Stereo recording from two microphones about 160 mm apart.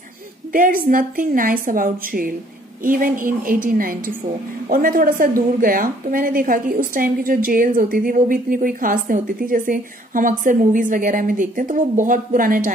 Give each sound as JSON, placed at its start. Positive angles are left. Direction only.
{"t": 0.5, "sound": "a woman's voice", "side_deg": -60}